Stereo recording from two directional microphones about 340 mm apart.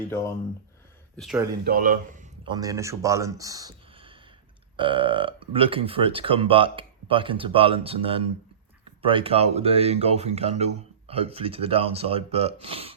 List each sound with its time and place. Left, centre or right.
1.1 s speech: centre
1.6 s speech: right